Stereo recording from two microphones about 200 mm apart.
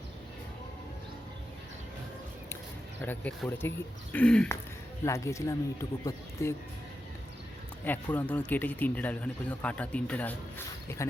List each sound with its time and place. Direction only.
3.0 s speech: 10° left (ahead or behind)
7.9 s speech: 10° left (ahead or behind)